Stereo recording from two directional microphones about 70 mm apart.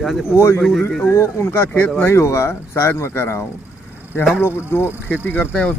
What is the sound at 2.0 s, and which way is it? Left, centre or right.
Speech, left.